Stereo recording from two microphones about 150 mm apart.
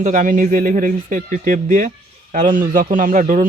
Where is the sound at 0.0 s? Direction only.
60° right (ahead or behind).